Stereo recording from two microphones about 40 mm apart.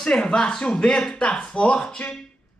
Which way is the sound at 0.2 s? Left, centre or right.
Left.